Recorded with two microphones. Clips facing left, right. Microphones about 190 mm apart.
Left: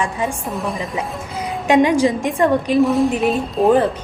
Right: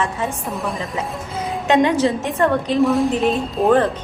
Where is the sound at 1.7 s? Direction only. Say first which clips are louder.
Left 2 dB; 10° left (ahead or behind).